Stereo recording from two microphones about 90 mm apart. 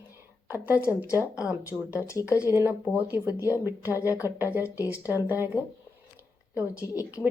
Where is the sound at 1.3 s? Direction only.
10° right (ahead or behind).